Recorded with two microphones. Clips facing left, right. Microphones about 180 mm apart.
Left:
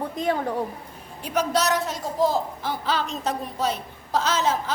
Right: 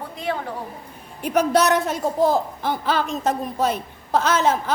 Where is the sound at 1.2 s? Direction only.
55° right (ahead or behind).